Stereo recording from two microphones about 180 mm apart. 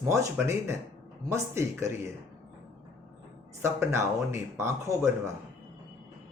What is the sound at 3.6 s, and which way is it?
Speech, 15° right (ahead or behind).